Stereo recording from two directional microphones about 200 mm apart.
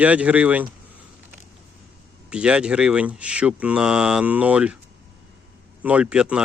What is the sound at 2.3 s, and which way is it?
Speech, 5° right (ahead or behind).